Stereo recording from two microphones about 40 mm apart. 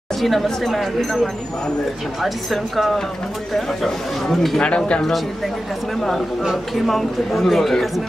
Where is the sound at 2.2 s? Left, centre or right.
Centre.